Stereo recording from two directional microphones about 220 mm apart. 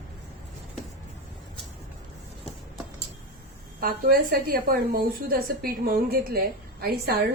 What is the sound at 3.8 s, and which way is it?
A woman's voice, 40° right (ahead or behind).